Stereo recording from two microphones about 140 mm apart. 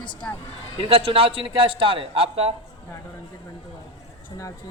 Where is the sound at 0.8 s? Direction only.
40° right (ahead or behind).